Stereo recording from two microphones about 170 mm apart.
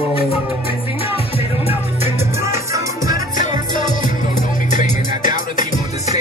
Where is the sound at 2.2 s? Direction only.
15° right (ahead or behind).